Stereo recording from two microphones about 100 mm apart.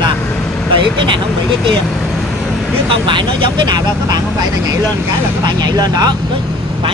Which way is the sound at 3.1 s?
55° right (ahead or behind).